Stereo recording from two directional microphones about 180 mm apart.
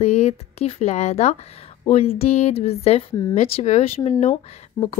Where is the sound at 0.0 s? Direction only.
35° left (ahead or behind).